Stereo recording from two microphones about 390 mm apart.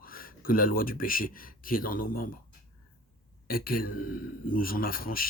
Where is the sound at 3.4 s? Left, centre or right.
Left.